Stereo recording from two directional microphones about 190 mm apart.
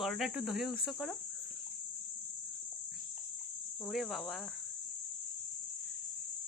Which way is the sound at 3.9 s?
Centre (ahead or behind).